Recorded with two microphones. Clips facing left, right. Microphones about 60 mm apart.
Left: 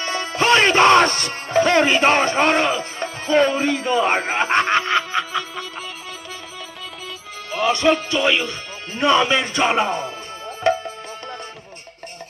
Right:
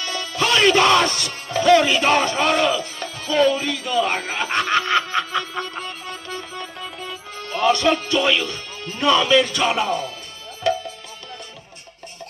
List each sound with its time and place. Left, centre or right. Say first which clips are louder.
0.0 s speech: left 3 dB; left
5.1 s music: right 1 dB; centre
7.7 s speech: left 4 dB; left
10.6 s music: left 2 dB; left